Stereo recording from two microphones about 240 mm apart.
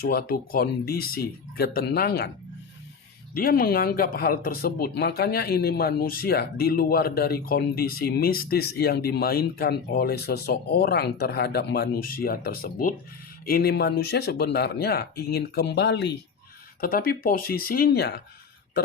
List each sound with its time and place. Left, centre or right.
0.0 s speech: left
3.3 s speech: left